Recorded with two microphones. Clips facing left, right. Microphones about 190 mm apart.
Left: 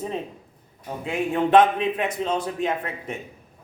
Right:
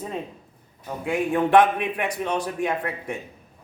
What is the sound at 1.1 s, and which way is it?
Speech, 20° left (ahead or behind).